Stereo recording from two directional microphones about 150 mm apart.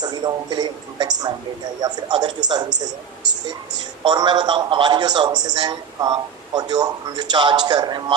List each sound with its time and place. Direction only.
0.0 s a man's voice: 25° right (ahead or behind)
4.0 s a man's voice: 30° right (ahead or behind)